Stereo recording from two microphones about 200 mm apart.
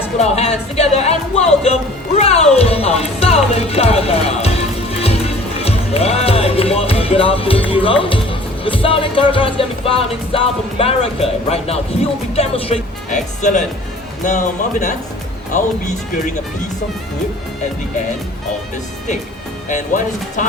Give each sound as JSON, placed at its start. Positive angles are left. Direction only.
{"t": 0.2, "sound": "music", "side_deg": 30}
{"t": 12.3, "sound": "speech", "side_deg": 30}
{"t": 19.6, "sound": "speech", "side_deg": 40}